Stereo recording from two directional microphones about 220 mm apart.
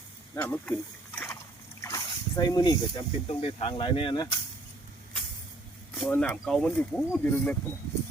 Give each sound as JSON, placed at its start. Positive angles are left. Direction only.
{"t": 0.3, "sound": "speech", "side_deg": 5}
{"t": 6.0, "sound": "speech", "side_deg": 10}